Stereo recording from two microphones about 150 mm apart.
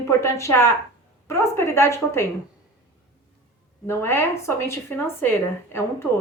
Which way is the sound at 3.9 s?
15° left (ahead or behind).